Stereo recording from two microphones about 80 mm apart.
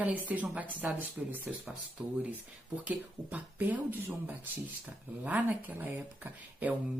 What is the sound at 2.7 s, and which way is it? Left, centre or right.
Speech, centre.